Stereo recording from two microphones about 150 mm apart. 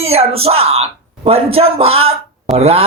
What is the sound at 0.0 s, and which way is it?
Speech, 45° right (ahead or behind).